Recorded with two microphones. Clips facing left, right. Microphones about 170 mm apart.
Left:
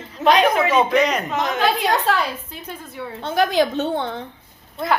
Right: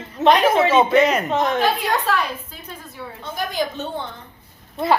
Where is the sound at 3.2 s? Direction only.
75° left (ahead or behind).